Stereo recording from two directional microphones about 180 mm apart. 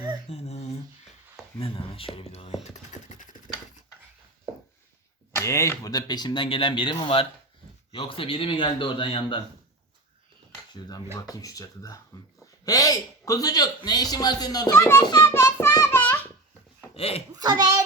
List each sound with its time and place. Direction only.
0.3 s a sound: 35° left (ahead or behind)
1.5 s speech: 30° left (ahead or behind)
2.6 s a sound: 40° left (ahead or behind)
5.4 s a man's voice: 15° left (ahead or behind)
10.8 s a man's voice: 25° left (ahead or behind)
15.2 s music: 15° left (ahead or behind)
15.7 s child singing: 15° left (ahead or behind)
16.9 s a child's voice: 30° left (ahead or behind)
17.3 s a child's voice: 25° right (ahead or behind)